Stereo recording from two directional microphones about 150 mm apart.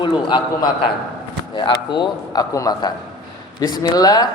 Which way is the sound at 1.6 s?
30° left (ahead or behind).